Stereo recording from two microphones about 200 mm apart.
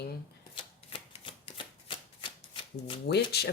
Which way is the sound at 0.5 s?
25° left (ahead or behind).